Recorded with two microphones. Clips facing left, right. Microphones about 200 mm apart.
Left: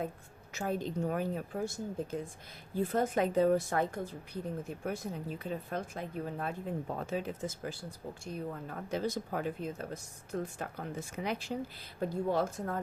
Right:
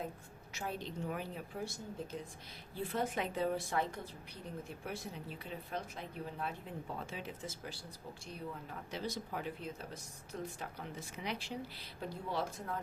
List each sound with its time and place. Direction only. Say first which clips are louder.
0.7 s a woman's voice: left 8 dB; 45° left (ahead or behind)
2.7 s a woman's voice: left 7 dB; 45° left (ahead or behind)